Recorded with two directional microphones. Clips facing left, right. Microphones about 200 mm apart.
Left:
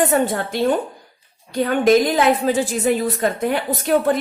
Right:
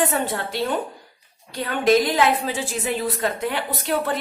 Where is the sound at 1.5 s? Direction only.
50° left (ahead or behind).